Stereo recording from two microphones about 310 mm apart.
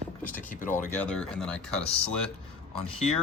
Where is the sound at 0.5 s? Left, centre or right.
Left.